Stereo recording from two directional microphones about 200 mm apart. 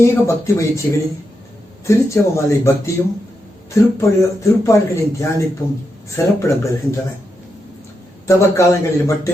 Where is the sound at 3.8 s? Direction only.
15° left (ahead or behind).